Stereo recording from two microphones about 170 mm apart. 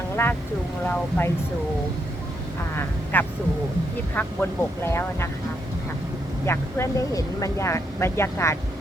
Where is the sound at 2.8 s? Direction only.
10° left (ahead or behind).